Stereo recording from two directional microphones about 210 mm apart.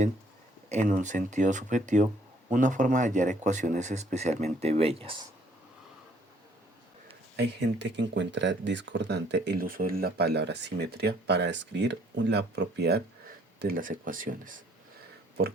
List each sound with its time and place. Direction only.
0.7 s speech: 35° right (ahead or behind)
7.3 s speech: 55° right (ahead or behind)